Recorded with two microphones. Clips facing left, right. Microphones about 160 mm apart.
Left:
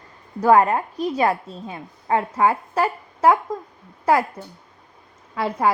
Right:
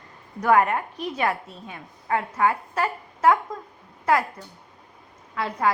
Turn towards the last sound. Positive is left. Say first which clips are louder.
# left 4 dB
turn(degrees=25)  # may be behind; listen again after turning